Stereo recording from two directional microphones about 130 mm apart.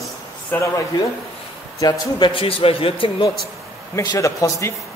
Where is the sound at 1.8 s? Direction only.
30° left (ahead or behind).